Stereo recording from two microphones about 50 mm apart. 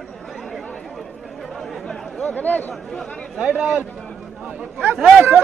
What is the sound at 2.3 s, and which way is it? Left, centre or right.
Speech, left.